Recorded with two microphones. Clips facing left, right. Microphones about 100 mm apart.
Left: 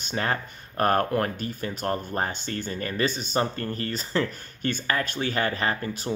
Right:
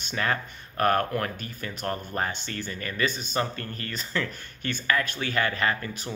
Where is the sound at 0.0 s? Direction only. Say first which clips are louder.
Left 1 dB; 30° left (ahead or behind).